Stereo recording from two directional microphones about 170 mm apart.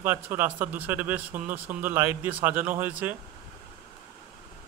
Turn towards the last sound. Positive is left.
turn(degrees=-10)  # may be behind; listen again after turning